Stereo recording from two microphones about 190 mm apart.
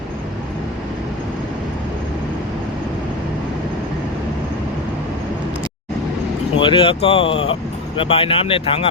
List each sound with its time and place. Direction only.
6.6 s speech: 25° left (ahead or behind)